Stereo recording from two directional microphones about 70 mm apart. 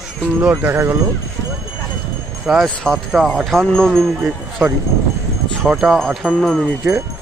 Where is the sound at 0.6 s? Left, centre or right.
Right.